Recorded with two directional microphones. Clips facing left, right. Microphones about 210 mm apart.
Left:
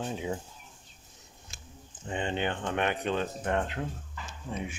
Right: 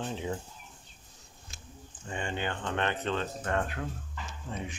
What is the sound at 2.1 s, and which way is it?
Speech, 20° left (ahead or behind).